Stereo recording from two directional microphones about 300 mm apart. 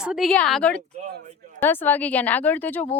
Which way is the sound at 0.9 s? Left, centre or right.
Right.